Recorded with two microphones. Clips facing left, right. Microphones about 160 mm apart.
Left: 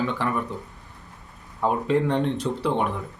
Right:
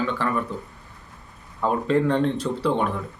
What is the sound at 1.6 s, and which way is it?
Speech, 15° left (ahead or behind).